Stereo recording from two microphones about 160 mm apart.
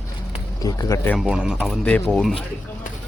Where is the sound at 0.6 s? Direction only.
20° left (ahead or behind).